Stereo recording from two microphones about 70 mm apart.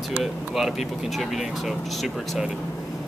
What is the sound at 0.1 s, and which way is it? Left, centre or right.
Speech, centre.